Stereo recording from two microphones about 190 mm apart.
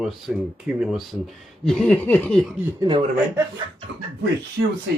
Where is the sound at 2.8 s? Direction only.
20° right (ahead or behind).